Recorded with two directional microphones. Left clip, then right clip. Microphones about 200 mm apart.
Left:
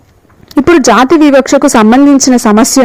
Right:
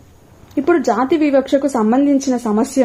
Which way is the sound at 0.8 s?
40° left (ahead or behind).